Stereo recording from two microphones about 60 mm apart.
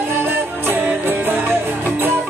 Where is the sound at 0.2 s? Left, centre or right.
Right.